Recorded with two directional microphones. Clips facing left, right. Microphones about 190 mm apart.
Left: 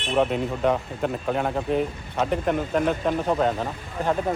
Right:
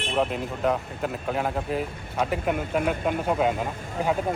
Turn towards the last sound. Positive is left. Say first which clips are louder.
# even
turn(degrees=-10)  # may be behind; listen again after turning